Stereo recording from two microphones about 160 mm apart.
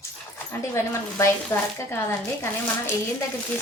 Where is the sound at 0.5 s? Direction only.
15° left (ahead or behind).